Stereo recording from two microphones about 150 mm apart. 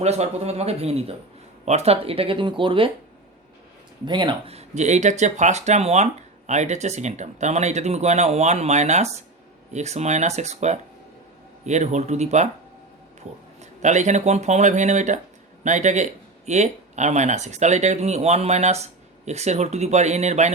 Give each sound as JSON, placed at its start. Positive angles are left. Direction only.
{"t": 0.0, "sound": "speech", "side_deg": -45}
{"t": 4.0, "sound": "speech", "side_deg": -30}
{"t": 4.5, "sound": "speech", "side_deg": -50}
{"t": 13.6, "sound": "speech", "side_deg": -50}